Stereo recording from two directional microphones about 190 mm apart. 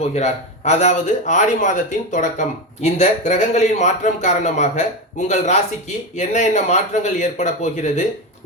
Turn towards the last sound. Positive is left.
turn(degrees=40)  # may be behind; listen again after turning